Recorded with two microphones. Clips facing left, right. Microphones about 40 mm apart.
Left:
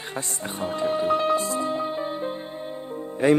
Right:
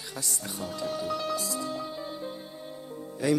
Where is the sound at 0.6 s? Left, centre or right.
Left.